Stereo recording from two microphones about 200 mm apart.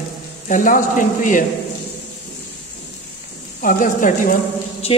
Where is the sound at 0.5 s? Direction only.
40° left (ahead or behind).